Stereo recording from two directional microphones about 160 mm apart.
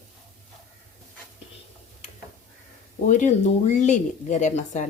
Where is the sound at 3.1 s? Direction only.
50° left (ahead or behind).